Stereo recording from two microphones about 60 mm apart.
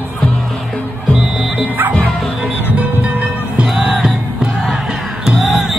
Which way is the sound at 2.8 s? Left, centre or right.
Right.